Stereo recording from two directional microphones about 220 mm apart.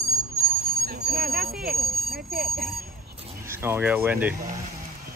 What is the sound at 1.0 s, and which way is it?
Speech, 45° right (ahead or behind).